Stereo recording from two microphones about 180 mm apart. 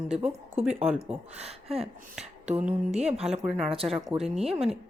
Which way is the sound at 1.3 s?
35° right (ahead or behind).